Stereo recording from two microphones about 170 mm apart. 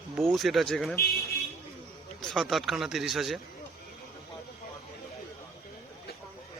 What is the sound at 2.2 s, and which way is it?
Speech, centre (ahead or behind).